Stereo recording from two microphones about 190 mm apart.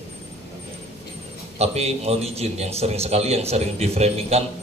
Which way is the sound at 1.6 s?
35° right (ahead or behind).